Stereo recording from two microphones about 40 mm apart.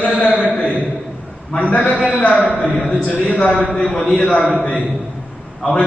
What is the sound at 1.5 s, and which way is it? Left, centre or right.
A man's voice, left.